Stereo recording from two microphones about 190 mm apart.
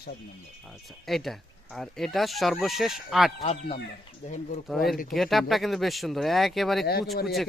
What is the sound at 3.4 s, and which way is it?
Speech, 30° left (ahead or behind).